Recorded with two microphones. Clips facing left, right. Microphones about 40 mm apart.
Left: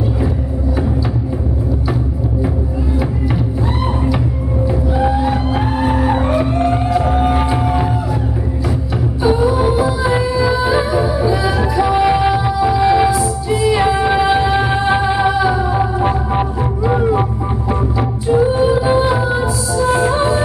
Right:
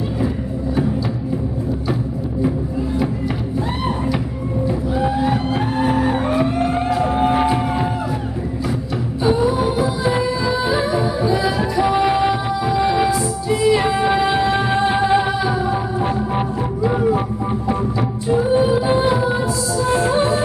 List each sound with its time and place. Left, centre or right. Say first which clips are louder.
4.9 s music: left 2 dB; centre
9.2 s music: left 3 dB; centre